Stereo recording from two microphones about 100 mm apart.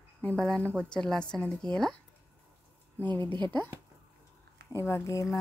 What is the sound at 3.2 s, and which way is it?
Speech, 45° right (ahead or behind).